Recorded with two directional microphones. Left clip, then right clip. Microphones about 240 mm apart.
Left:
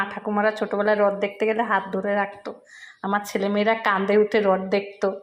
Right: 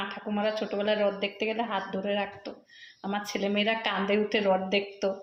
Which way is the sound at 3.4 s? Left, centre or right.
Centre.